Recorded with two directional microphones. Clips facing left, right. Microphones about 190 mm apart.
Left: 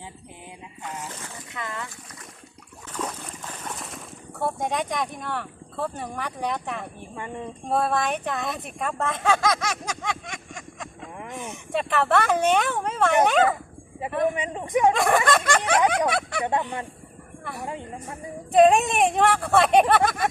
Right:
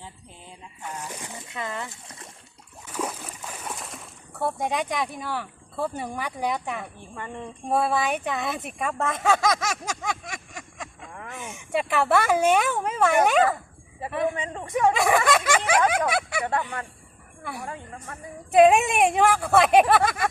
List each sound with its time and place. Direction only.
1.0 s dog: 15° right (ahead or behind)
2.9 s a sound: 5° right (ahead or behind)
7.7 s speech: 5° right (ahead or behind)
14.0 s a man's voice: 15° left (ahead or behind)
14.9 s speech: centre (ahead or behind)
16.5 s a woman's voice: 20° left (ahead or behind)
18.5 s speech: 5° right (ahead or behind)